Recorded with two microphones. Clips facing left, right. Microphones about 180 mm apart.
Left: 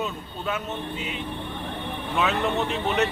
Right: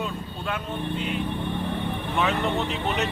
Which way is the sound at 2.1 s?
Centre (ahead or behind).